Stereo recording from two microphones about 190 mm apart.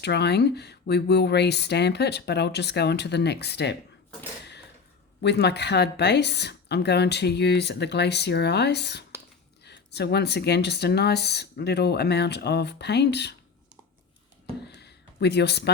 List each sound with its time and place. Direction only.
0.0 s speech: 60° left (ahead or behind)
5.2 s speech: 60° left (ahead or behind)
14.7 s a sound: 60° left (ahead or behind)